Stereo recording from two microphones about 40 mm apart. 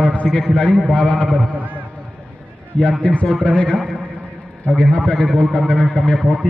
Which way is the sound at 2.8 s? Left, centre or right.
Left.